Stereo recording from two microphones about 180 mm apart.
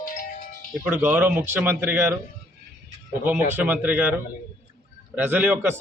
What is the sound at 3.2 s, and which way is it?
Speech, 10° right (ahead or behind).